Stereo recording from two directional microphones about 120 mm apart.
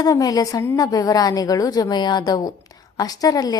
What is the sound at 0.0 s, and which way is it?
A woman's voice, 30° left (ahead or behind).